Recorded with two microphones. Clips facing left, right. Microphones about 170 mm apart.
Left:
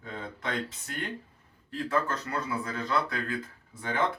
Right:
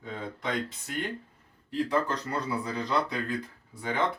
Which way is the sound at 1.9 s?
15° right (ahead or behind).